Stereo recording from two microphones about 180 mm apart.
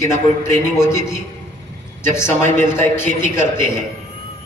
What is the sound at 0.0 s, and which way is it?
A man's voice, 15° left (ahead or behind).